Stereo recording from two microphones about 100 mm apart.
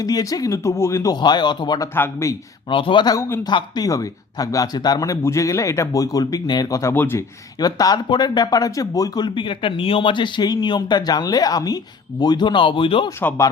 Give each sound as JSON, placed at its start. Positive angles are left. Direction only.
{"t": 0.0, "sound": "speech", "side_deg": 40}
{"t": 1.1, "sound": "speech", "side_deg": 45}
{"t": 2.0, "sound": "a man's voice", "side_deg": 25}
{"t": 2.6, "sound": "speech", "side_deg": 60}
{"t": 3.2, "sound": "a man's voice", "side_deg": 25}
{"t": 3.4, "sound": "speech", "side_deg": 40}
{"t": 6.9, "sound": "a man's voice", "side_deg": 20}
{"t": 7.6, "sound": "speech", "side_deg": 40}
{"t": 13.1, "sound": "a man's voice", "side_deg": 25}